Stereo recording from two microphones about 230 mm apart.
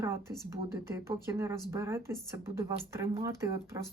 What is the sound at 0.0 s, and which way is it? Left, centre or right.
Speech, centre.